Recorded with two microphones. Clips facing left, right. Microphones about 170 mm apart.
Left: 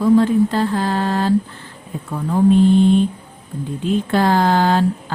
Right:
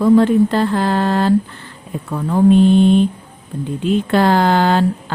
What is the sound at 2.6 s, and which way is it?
A woman's voice, 70° right (ahead or behind).